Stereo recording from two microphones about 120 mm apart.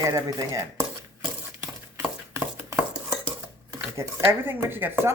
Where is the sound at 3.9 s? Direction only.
20° right (ahead or behind).